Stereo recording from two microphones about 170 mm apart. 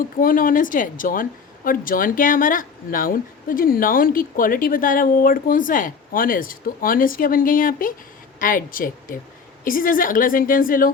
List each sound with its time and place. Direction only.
0.0 s a woman's voice: 55° left (ahead or behind)